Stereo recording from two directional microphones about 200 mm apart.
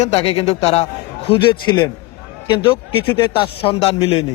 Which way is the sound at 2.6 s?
25° left (ahead or behind).